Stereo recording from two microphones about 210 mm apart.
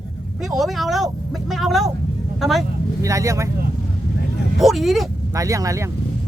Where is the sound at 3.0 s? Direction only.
15° right (ahead or behind).